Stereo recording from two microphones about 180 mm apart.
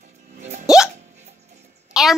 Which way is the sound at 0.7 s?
5° right (ahead or behind).